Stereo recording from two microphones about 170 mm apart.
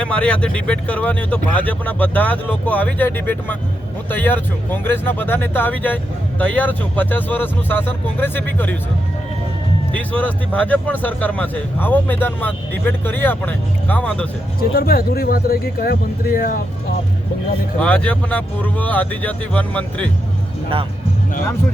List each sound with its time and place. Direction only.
0.0 s speech: 5° left (ahead or behind)
9.9 s speech: 10° left (ahead or behind)
14.6 s speech: 60° left (ahead or behind)
17.7 s speech: 10° left (ahead or behind)